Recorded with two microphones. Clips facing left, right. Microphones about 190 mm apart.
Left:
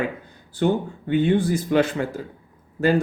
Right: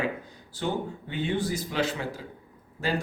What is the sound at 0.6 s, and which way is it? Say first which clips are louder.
Speech: left 8 dB; 60° left (ahead or behind).